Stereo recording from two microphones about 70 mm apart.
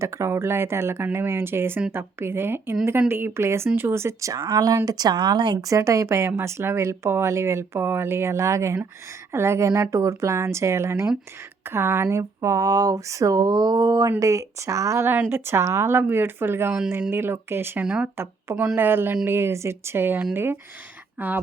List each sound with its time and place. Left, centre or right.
0.0 s speech: right
3.8 s speech: right
4.0 s speech: right
4.4 s speech: right
5.6 s speech: right
12.0 s speech: right
14.2 s speech: right
15.1 s speech: right
17.8 s speech: centre
18.8 s speech: right